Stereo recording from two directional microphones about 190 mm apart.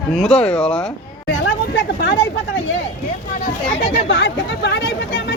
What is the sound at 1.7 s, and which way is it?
Speech, 65° left (ahead or behind).